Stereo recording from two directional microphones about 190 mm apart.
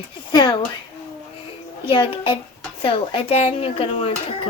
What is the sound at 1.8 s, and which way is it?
Speech, 30° left (ahead or behind).